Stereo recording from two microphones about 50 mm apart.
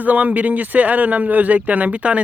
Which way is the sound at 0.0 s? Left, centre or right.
Right.